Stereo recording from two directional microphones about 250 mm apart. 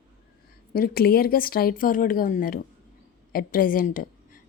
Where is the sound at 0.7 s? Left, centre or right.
Left.